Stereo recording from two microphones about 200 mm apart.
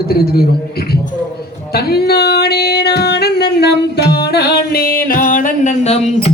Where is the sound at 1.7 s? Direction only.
50° left (ahead or behind).